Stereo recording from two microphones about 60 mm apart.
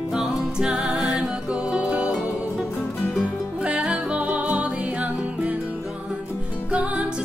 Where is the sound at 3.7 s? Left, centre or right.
Right.